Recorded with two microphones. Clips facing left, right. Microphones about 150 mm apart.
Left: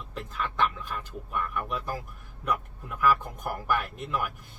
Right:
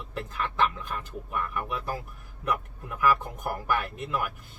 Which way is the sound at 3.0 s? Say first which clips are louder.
Even; 5° right (ahead or behind).